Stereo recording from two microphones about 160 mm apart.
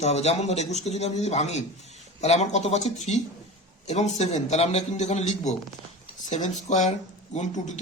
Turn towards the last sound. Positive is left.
turn(degrees=45)  # may be behind; listen again after turning